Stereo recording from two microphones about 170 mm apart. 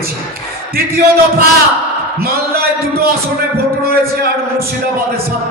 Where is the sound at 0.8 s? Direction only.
60° right (ahead or behind).